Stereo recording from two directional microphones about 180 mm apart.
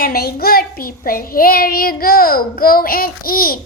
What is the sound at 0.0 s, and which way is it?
Child singing, 55° left (ahead or behind).